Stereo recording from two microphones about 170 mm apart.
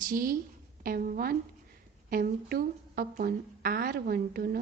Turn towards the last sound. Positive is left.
turn(degrees=-60)  # may be behind; listen again after turning